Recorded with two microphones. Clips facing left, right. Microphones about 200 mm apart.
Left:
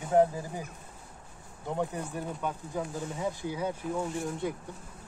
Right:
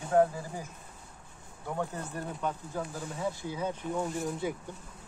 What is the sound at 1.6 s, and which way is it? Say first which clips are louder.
Speech: left 3 dB; 15° left (ahead or behind).